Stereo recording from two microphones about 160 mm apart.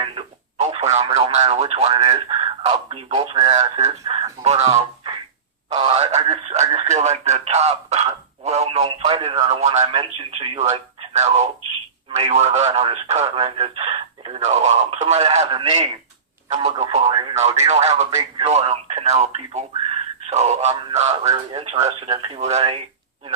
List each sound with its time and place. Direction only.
0.0 s radio: 35° right (ahead or behind)
1.3 s speech: 40° right (ahead or behind)
9.8 s speech: 35° right (ahead or behind)